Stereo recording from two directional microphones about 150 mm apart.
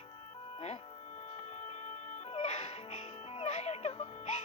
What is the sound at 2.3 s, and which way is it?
Music, 45° left (ahead or behind).